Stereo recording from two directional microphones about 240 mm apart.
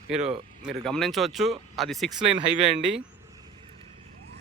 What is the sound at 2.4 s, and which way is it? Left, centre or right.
Speech, right.